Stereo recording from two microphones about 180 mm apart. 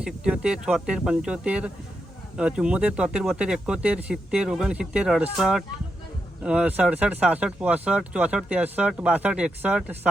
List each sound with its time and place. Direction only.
0.0 s speech: 5° right (ahead or behind)